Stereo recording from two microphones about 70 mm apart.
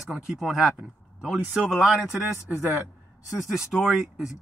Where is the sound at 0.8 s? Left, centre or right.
Centre.